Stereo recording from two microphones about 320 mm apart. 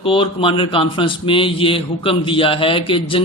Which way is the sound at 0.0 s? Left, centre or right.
Centre.